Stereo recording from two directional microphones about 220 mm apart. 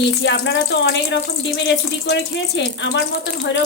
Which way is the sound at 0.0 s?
50° left (ahead or behind).